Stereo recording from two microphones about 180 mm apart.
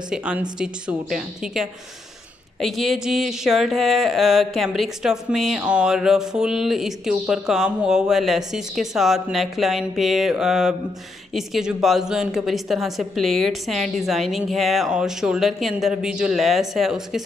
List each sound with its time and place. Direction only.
0.1 s speech: 5° right (ahead or behind)